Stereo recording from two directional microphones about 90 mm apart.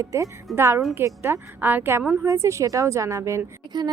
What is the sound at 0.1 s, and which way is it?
A woman's voice, 35° right (ahead or behind).